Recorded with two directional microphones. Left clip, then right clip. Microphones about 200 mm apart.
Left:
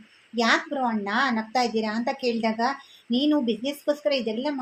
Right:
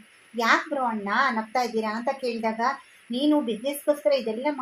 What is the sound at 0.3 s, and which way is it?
A woman's voice, 30° right (ahead or behind).